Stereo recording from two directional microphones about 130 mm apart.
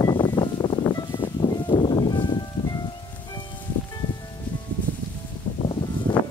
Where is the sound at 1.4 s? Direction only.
35° left (ahead or behind).